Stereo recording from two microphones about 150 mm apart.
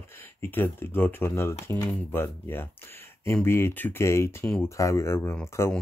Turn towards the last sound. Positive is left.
turn(degrees=20)  # may be behind; listen again after turning